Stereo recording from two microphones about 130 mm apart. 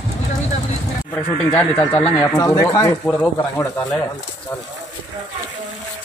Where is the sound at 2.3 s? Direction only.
25° left (ahead or behind).